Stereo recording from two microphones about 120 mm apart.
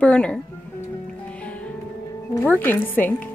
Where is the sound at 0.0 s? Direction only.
10° left (ahead or behind).